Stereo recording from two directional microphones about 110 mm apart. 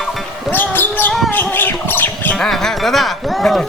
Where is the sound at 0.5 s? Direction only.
15° left (ahead or behind).